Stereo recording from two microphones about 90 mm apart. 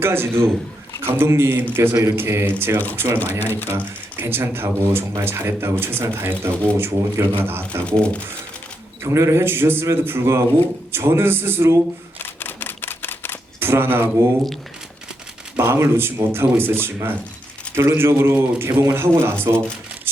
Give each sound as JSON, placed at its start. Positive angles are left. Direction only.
{"t": 0.0, "sound": "speech", "side_deg": -25}
{"t": 4.2, "sound": "speech", "side_deg": -25}
{"t": 7.9, "sound": "speech", "side_deg": 10}
{"t": 9.0, "sound": "speech", "side_deg": -30}
{"t": 12.2, "sound": "camera", "side_deg": 25}
{"t": 13.6, "sound": "speech", "side_deg": -25}
{"t": 15.5, "sound": "speech", "side_deg": -30}